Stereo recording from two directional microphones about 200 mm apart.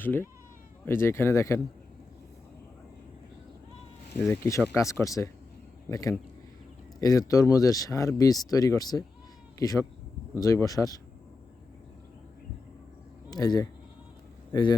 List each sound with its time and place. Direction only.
0.0 s speech: 10° left (ahead or behind)
4.2 s speech: 15° left (ahead or behind)
13.3 s speech: 20° left (ahead or behind)